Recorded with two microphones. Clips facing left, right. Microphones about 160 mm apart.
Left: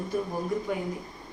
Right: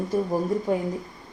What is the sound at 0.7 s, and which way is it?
Speech, 35° right (ahead or behind).